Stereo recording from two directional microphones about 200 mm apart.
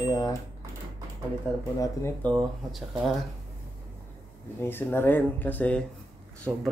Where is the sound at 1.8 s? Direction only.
10° left (ahead or behind).